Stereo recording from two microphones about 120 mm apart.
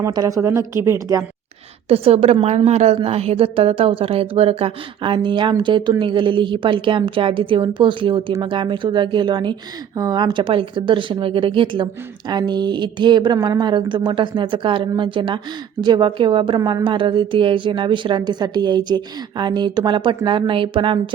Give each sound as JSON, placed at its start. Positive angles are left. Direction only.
{"t": 0.1, "sound": "a woman's voice", "side_deg": -30}
{"t": 1.9, "sound": "a woman's voice", "side_deg": -60}